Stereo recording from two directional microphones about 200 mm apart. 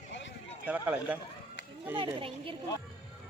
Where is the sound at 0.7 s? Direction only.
5° right (ahead or behind).